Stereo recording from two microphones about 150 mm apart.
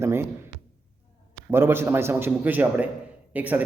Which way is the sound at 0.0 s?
15° right (ahead or behind).